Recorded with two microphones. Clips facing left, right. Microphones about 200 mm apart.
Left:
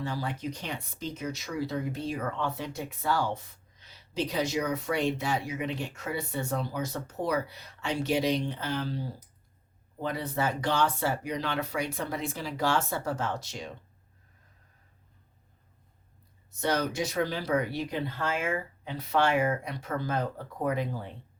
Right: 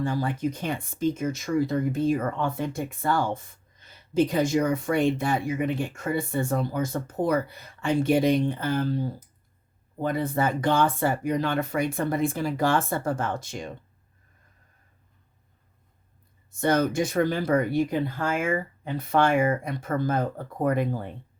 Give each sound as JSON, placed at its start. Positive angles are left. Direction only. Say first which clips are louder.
{"t": 0.0, "sound": "speech", "louder": "right 7 dB", "side_deg": -50}
{"t": 16.5, "sound": "speech", "louder": "right 6 dB", "side_deg": -50}